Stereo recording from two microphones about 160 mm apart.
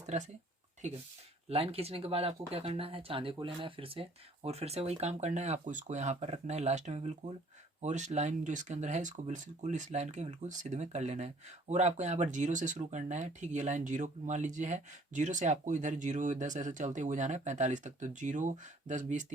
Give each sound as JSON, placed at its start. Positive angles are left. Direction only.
{"t": 0.0, "sound": "speech", "side_deg": -45}